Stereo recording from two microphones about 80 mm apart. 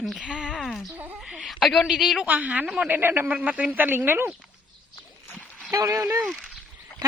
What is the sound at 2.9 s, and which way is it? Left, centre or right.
Speech, right.